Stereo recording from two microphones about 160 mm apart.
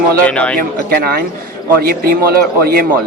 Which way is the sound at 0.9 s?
70° right (ahead or behind).